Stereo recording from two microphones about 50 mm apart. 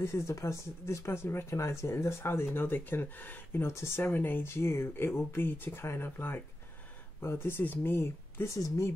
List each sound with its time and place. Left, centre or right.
0.0 s speech: left
2.5 s speech: left
3.6 s speech: left
4.0 s speech: left
4.5 s speech: left
5.5 s speech: left
5.8 s speech: left
6.0 s speech: left
7.2 s speech: left
7.6 s speech: left
8.5 s speech: left